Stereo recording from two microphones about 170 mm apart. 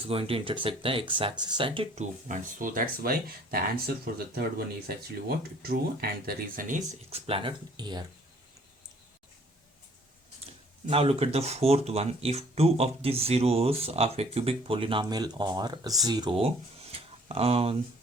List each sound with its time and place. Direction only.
0.1 s speech: 35° right (ahead or behind)
2.2 s speech: 50° right (ahead or behind)
7.1 s speech: 35° right (ahead or behind)
10.4 s speech: 35° right (ahead or behind)